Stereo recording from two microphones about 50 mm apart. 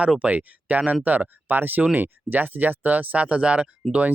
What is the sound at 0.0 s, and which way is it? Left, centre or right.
Speech, right.